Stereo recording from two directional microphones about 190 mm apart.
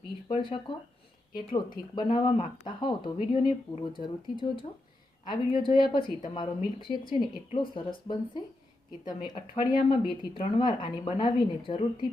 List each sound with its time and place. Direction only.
0.3 s speech: 25° left (ahead or behind)